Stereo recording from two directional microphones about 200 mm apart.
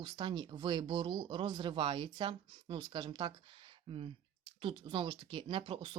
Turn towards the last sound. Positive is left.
turn(degrees=-25)  # may be behind; listen again after turning